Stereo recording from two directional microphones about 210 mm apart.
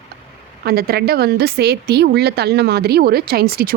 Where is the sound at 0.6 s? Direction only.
45° right (ahead or behind).